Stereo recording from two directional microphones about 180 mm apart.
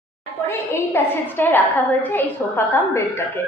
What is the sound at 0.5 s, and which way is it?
A woman's voice, 15° left (ahead or behind).